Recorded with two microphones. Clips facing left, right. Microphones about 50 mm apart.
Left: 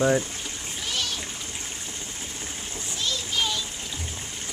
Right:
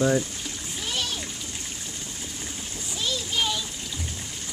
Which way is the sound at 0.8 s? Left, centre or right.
Centre.